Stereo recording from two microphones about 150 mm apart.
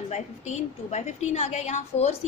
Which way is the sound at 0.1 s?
50° left (ahead or behind).